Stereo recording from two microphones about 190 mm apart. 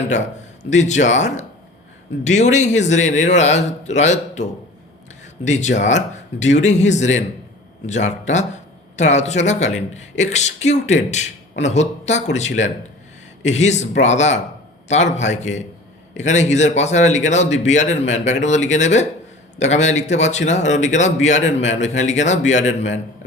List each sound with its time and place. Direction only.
0.1 s speech: 40° left (ahead or behind)
5.5 s speech: 40° left (ahead or behind)